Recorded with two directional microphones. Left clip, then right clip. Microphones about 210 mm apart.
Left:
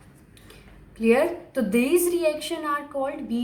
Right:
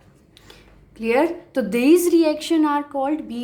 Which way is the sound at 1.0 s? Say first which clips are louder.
Right 1 dB; 50° right (ahead or behind).